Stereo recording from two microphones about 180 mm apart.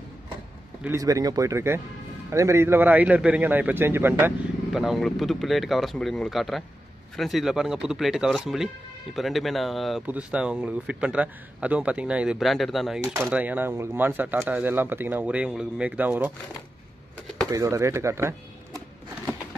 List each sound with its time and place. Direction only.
0.8 s speech: 15° right (ahead or behind)
4.7 s speech: centre (ahead or behind)
17.5 s speech: 15° right (ahead or behind)